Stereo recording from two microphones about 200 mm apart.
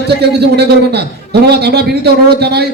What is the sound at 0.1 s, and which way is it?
A man's voice, 55° right (ahead or behind).